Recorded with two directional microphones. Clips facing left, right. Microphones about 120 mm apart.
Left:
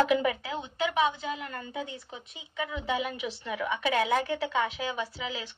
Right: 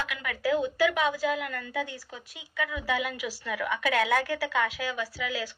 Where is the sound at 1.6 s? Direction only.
25° left (ahead or behind).